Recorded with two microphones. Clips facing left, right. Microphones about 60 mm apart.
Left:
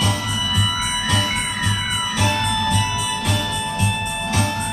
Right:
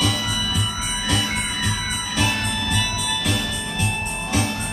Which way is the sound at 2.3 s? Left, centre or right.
Left.